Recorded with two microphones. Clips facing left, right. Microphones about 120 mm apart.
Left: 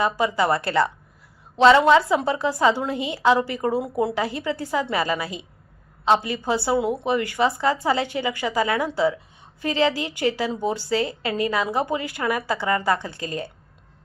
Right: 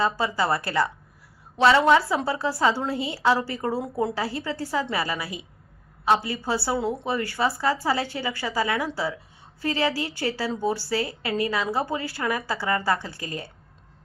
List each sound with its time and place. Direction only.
0.0 s a woman's voice: 20° left (ahead or behind)